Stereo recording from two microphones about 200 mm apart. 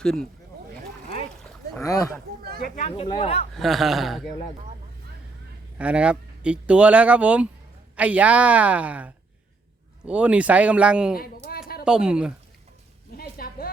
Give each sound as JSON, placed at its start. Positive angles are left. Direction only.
{"t": 0.0, "sound": "speech", "side_deg": 5}
{"t": 1.8, "sound": "speech", "side_deg": 15}
{"t": 2.8, "sound": "speech", "side_deg": 30}
{"t": 3.5, "sound": "speech", "side_deg": 0}
{"t": 5.7, "sound": "speech", "side_deg": -5}
{"t": 11.2, "sound": "a sound", "side_deg": 45}
{"t": 11.9, "sound": "speech", "side_deg": -5}
{"t": 13.1, "sound": "a sound", "side_deg": 45}